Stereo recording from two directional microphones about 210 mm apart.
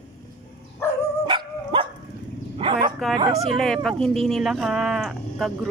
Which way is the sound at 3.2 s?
20° right (ahead or behind).